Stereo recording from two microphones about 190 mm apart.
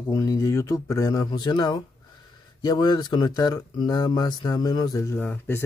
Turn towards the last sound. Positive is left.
turn(degrees=10)  # may be behind; listen again after turning